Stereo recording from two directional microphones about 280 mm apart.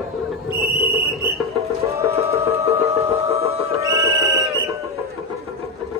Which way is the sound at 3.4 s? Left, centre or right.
Centre.